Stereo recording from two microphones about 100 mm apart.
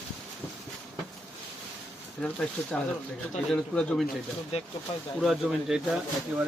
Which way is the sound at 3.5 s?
5° left (ahead or behind).